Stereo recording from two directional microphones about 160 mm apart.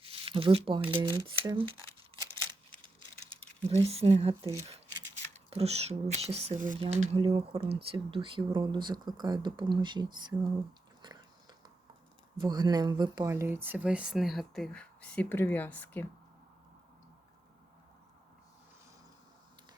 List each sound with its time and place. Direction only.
0.0 s speech: 35° right (ahead or behind)
3.7 s speech: 40° right (ahead or behind)
12.4 s speech: 25° right (ahead or behind)
13.3 s speech: 15° right (ahead or behind); by 16.0 s 10° left (ahead or behind)